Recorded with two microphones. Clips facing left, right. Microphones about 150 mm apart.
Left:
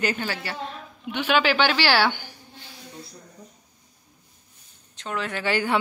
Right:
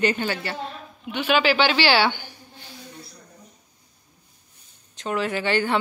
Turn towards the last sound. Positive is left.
turn(degrees=10)  # may be behind; listen again after turning